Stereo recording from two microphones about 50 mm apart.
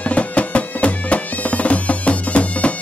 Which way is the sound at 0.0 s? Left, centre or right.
Left.